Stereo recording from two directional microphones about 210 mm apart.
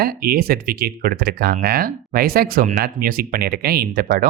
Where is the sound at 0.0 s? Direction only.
45° right (ahead or behind).